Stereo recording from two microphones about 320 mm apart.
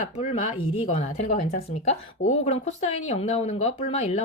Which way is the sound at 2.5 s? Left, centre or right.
Left.